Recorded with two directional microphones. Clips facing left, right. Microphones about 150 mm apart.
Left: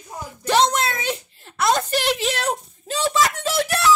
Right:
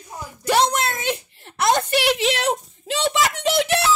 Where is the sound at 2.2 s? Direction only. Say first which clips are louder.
Right 3 dB; 65° right (ahead or behind).